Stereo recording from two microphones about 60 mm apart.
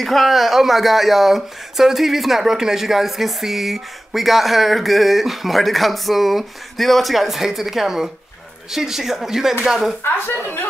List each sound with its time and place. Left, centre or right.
0.0 s speech: centre
10.0 s speech: left